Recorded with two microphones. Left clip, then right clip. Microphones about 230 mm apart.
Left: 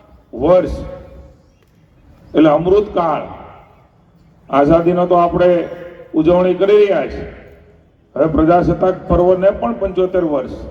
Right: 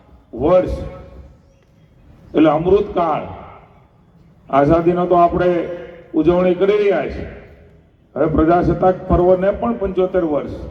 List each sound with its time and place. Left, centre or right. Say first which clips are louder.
0.3 s a man's voice: left 2 dB; left
2.3 s a man's voice: left 2 dB; left
4.4 s a man's voice: left 2 dB; left
8.1 s a man's voice: left 2 dB; left